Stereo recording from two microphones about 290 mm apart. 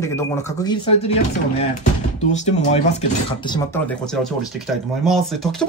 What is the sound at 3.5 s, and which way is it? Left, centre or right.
Speech, centre.